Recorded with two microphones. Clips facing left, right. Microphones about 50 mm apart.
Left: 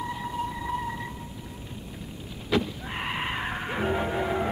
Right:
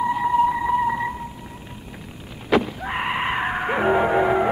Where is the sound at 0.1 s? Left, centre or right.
Right.